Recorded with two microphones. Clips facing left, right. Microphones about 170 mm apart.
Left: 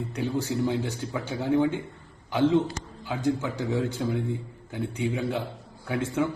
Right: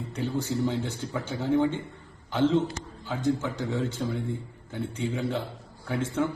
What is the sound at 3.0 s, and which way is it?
A man's voice, 15° left (ahead or behind).